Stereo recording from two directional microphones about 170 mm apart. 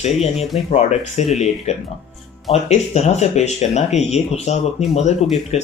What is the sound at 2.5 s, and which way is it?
Speech, 40° left (ahead or behind).